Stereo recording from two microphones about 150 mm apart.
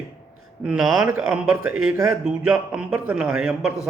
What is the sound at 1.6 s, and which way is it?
A man's voice, 15° right (ahead or behind).